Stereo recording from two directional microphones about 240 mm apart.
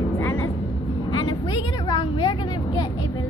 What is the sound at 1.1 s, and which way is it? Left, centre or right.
Vehicle, centre.